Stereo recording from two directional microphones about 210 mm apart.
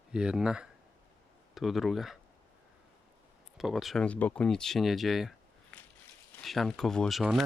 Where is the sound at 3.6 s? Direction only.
Centre (ahead or behind).